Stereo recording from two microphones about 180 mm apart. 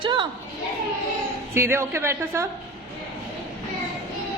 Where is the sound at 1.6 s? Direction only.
15° right (ahead or behind).